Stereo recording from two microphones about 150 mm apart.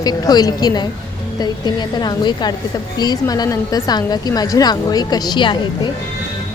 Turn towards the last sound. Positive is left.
turn(degrees=30)  # may be behind; listen again after turning